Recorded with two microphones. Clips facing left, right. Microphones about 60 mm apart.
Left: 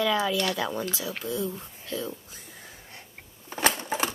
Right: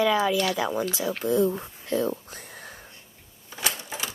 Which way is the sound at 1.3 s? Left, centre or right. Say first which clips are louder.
Right 10 dB; right.